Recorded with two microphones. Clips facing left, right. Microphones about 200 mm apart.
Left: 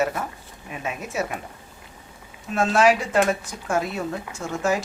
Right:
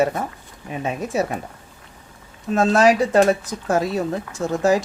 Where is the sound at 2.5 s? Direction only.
40° right (ahead or behind).